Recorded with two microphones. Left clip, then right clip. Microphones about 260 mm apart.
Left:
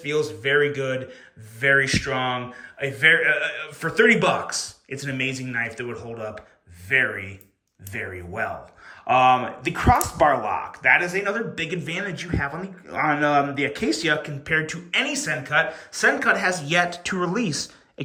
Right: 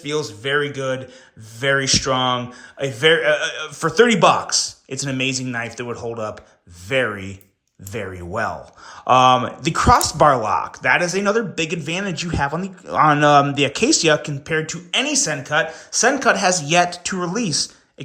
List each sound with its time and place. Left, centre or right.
0.0 s speech: centre
8.4 s speech: centre